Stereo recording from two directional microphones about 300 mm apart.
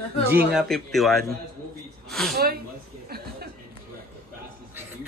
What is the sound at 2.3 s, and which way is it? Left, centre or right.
Speech, right.